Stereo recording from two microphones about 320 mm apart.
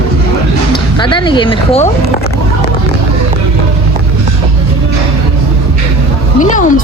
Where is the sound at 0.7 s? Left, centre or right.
Centre.